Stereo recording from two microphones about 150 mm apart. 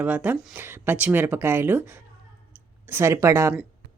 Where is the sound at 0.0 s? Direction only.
10° right (ahead or behind).